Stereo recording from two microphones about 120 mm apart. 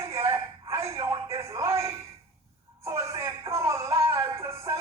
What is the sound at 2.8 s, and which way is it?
Music, 25° right (ahead or behind).